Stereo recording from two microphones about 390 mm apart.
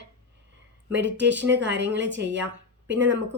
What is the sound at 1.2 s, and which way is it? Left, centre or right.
A woman's voice, right.